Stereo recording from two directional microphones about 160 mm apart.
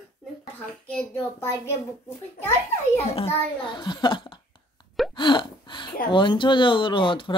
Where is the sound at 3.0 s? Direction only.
40° left (ahead or behind).